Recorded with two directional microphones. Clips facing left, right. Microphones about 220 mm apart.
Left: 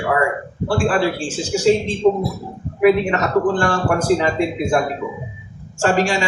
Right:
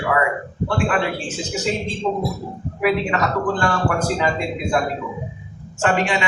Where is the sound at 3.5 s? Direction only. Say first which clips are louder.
Left 2 dB; 30° left (ahead or behind).